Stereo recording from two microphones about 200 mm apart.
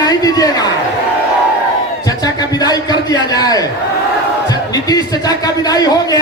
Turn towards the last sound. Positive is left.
turn(degrees=20)  # may be behind; listen again after turning